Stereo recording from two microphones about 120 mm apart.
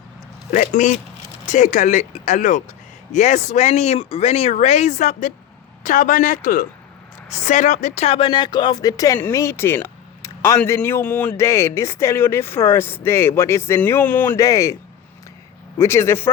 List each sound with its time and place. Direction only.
0.5 s speech: 90° left; by 10.6 s 25° left (ahead or behind)
11.0 s speech: 10° left (ahead or behind)
11.3 s speech: 25° left (ahead or behind)
14.3 s speech: 25° left (ahead or behind)
15.8 s speech: 20° left (ahead or behind)